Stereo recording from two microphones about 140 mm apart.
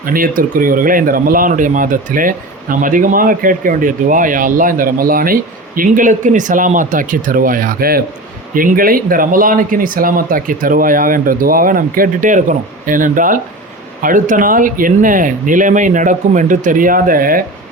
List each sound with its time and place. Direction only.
0.0 s speech: 90° right